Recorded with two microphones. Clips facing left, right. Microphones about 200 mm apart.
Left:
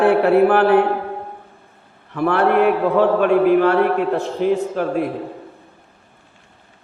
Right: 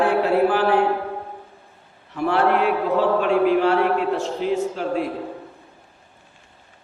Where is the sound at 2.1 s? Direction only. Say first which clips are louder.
Left 3 dB; 55° left (ahead or behind).